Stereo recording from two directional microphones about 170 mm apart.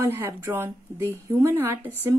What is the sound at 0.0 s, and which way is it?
Speech, 15° right (ahead or behind).